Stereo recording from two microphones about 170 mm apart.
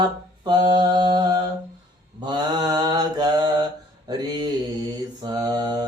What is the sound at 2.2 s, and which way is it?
Mantra, 25° right (ahead or behind).